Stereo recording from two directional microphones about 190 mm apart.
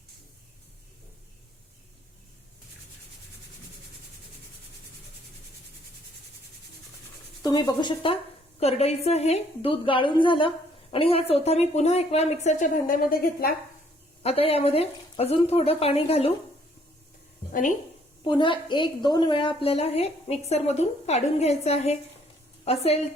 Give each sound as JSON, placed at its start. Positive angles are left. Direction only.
{"t": 7.4, "sound": "a woman's voice", "side_deg": 20}
{"t": 14.2, "sound": "a woman's voice", "side_deg": 30}
{"t": 17.5, "sound": "a woman's voice", "side_deg": 45}
{"t": 18.2, "sound": "a woman's voice", "side_deg": 25}